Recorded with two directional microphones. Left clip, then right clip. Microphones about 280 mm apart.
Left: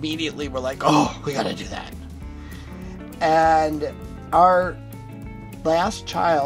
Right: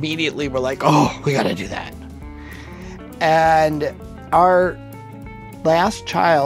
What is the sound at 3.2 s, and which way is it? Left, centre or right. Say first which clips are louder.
Speech: right 3 dB; right.